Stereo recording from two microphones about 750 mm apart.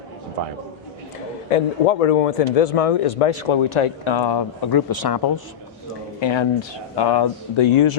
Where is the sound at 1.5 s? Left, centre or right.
Left.